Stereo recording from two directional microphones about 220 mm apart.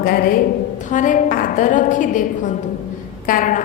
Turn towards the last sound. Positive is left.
turn(degrees=40)  # may be behind; listen again after turning